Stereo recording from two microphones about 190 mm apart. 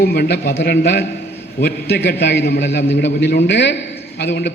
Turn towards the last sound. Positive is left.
turn(degrees=65)  # may be behind; listen again after turning